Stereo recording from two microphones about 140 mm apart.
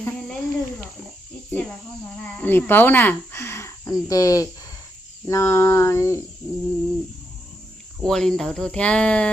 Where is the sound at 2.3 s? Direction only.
15° left (ahead or behind).